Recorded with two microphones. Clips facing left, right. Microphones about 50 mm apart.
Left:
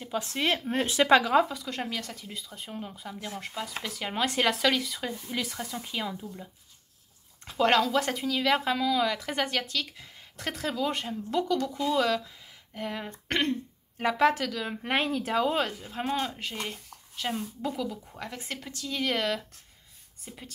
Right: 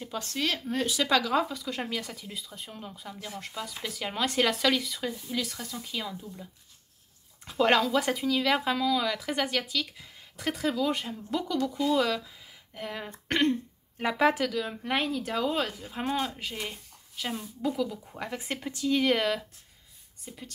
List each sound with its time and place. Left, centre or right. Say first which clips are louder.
0.0 s speech: left 3 dB; centre
0.3 s speech: left 2 dB; left
1.3 s speech: left 4 dB; centre
1.6 s speech: right 1 dB; centre
5.3 s speech: even; centre
7.4 s speech: even; centre
14.7 s speech: left 1 dB; left
15.2 s speech: left 2 dB; centre
18.2 s speech: right 4 dB; centre
20.3 s speech: even; centre